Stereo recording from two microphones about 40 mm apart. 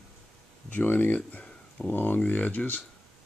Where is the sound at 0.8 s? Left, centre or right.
Left.